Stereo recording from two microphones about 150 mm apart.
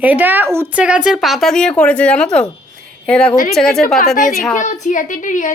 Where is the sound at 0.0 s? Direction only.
10° right (ahead or behind).